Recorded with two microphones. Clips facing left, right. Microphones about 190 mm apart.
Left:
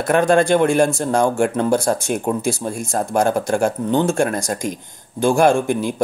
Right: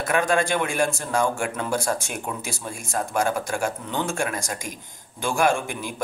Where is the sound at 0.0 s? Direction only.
40° left (ahead or behind).